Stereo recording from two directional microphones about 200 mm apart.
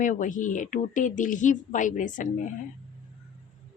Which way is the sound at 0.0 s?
40° left (ahead or behind).